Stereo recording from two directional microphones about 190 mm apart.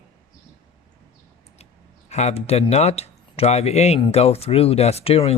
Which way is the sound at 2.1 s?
35° left (ahead or behind).